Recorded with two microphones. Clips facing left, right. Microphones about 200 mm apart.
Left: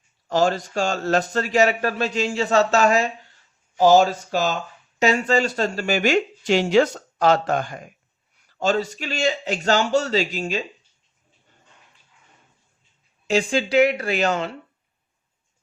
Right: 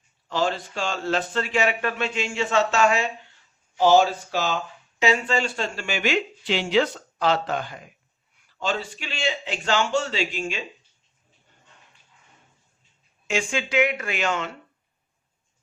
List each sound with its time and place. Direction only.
0.3 s a man's voice: 45° left (ahead or behind)
13.2 s a man's voice: 35° left (ahead or behind)